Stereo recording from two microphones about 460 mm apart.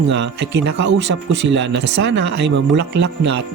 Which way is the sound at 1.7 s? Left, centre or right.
Right.